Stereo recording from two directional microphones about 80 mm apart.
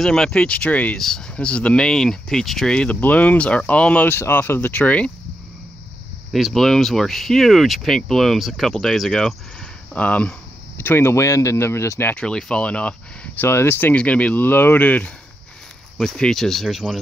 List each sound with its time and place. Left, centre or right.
0.0 s speech: centre
0.9 s speech: centre
6.3 s speech: centre
9.9 s speech: centre
10.8 s speech: left
12.2 s speech: centre
13.5 s speech: left
13.9 s speech: centre
16.0 s speech: centre